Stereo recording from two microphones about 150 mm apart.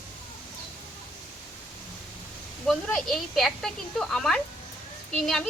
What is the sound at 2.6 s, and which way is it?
A woman's voice, 5° left (ahead or behind).